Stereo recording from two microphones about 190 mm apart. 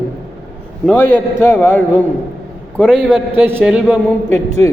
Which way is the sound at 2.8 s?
5° left (ahead or behind).